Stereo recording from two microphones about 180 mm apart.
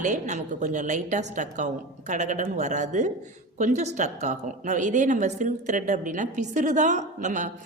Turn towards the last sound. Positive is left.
turn(degrees=-45)  # may be behind; listen again after turning